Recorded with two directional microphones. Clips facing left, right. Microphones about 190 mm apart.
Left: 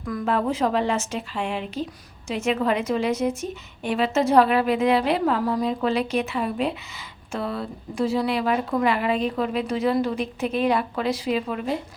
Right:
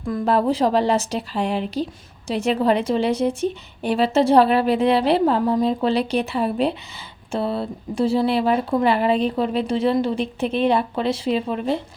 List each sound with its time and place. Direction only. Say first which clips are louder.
0.0 s a woman's voice: right 4 dB; 30° right (ahead or behind)